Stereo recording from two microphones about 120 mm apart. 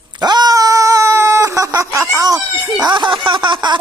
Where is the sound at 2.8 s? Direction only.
40° right (ahead or behind).